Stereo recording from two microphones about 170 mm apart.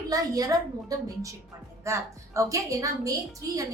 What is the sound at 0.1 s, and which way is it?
A woman's voice, 20° right (ahead or behind).